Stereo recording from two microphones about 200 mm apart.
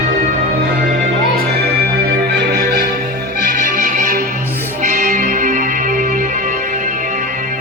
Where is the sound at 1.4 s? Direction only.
50° right (ahead or behind).